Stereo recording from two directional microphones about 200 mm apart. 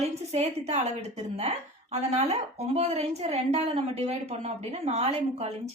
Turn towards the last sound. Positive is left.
turn(degrees=-30)  # may be behind; listen again after turning